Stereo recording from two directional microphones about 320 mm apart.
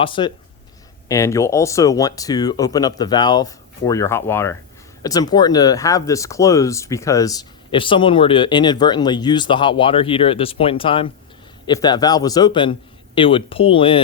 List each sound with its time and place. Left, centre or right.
0.0 s speech: centre